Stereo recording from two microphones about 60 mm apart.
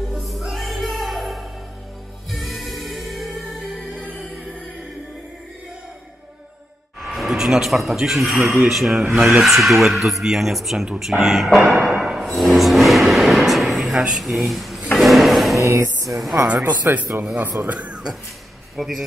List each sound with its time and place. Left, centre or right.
0.1 s music: centre
7.2 s speech: centre
9.0 s speech: centre
9.4 s speech: centre
12.4 s a sound: centre
15.5 s music: right
16.1 s speech: centre
16.8 s speech: right
17.6 s speech: right
18.8 s speech: centre